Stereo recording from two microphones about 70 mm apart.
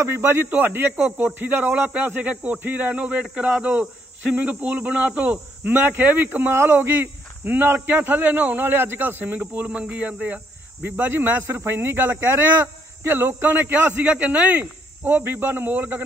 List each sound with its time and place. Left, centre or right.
0.0 s speech: right
0.9 s speech: centre